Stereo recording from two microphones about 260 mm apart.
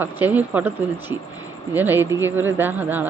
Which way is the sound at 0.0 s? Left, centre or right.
Centre.